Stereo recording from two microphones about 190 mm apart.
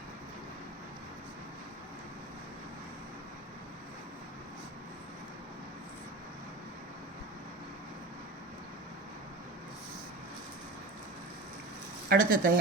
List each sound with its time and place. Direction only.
12.0 s speech: 45° right (ahead or behind)